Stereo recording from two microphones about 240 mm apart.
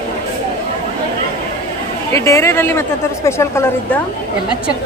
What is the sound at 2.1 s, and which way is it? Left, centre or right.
A woman's voice, centre.